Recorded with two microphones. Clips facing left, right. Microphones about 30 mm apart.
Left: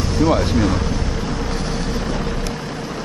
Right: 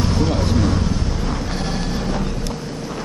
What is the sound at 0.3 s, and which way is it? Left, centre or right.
Speech, centre.